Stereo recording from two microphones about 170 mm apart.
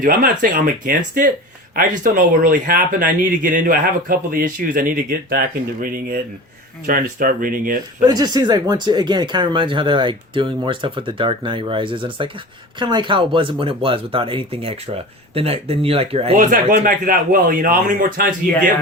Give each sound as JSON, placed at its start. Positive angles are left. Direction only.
{"t": 0.0, "sound": "speech", "side_deg": -55}
{"t": 8.0, "sound": "speech", "side_deg": -25}
{"t": 16.3, "sound": "speech", "side_deg": -50}